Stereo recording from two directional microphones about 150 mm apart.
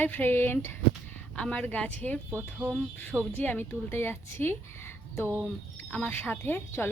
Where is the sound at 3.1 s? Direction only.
15° right (ahead or behind).